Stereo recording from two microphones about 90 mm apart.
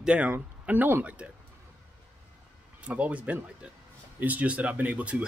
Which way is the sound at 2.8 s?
15° right (ahead or behind).